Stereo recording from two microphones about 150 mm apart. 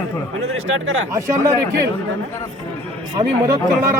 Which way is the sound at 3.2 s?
25° right (ahead or behind).